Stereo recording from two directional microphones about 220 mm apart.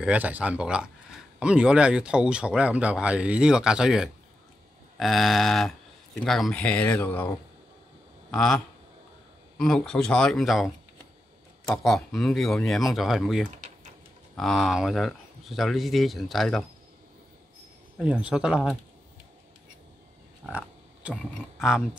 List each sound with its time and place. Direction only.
0.0 s speech: 5° right (ahead or behind)
11.7 s speech: centre (ahead or behind)
17.9 s speech: 5° right (ahead or behind)
20.4 s speech: 5° right (ahead or behind)